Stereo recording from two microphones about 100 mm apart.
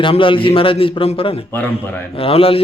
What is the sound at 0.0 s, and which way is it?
A man's voice, 60° left (ahead or behind).